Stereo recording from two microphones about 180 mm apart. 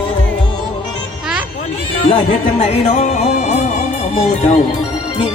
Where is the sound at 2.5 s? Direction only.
40° left (ahead or behind).